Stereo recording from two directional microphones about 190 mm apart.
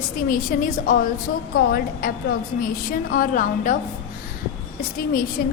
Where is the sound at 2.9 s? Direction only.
45° left (ahead or behind).